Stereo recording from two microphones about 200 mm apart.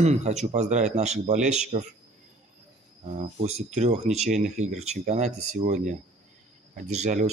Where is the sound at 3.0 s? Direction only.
35° right (ahead or behind).